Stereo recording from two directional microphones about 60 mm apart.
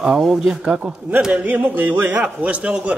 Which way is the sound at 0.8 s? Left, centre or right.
Right.